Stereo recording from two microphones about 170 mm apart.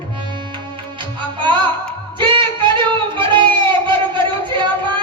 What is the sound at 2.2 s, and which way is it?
Music, 30° right (ahead or behind).